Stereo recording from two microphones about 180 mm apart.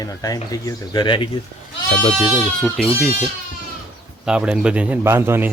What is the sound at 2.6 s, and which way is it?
Speech, centre (ahead or behind).